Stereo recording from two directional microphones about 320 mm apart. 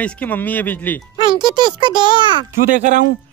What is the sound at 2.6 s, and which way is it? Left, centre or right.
Speech, right.